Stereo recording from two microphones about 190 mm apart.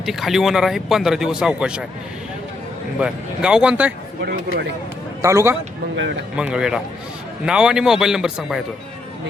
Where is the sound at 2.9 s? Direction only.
5° right (ahead or behind).